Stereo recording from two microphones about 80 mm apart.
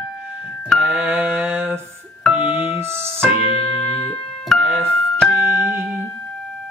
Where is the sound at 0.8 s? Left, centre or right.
Centre.